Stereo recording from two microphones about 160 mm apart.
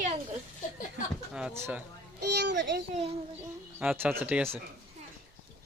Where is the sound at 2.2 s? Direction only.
90° right.